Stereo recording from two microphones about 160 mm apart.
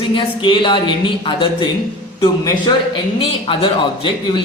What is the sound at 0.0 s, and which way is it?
A man's voice, 30° left (ahead or behind).